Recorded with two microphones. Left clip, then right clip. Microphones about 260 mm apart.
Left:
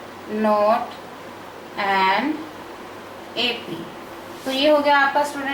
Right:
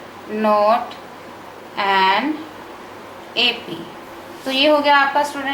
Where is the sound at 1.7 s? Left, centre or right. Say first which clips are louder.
Right 3 dB; centre.